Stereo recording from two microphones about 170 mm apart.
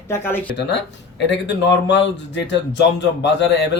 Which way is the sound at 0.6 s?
90° left.